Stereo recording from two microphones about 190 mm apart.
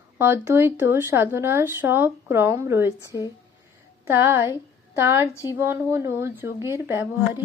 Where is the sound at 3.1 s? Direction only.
15° left (ahead or behind).